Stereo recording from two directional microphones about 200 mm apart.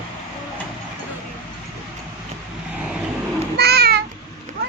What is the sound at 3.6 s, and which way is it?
Babbling, 55° right (ahead or behind).